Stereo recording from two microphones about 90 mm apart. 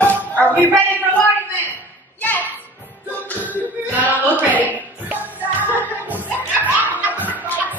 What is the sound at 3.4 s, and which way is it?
Music, 20° right (ahead or behind).